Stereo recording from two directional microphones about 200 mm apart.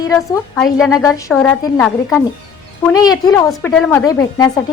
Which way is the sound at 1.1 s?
15° left (ahead or behind).